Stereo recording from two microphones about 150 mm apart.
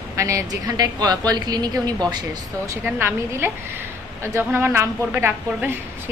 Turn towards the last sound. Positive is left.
turn(degrees=-15)  # may be behind; listen again after turning